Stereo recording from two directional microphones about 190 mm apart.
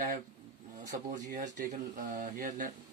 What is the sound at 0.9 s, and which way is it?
Speech, 40° right (ahead or behind).